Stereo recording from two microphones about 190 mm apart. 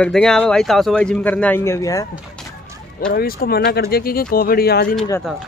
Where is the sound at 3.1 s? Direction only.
55° left (ahead or behind).